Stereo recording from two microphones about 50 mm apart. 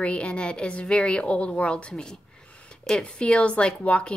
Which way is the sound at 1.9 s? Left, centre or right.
Centre.